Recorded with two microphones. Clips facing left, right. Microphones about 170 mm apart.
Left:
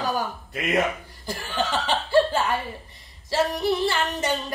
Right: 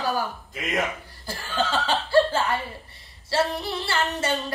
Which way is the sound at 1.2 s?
15° left (ahead or behind).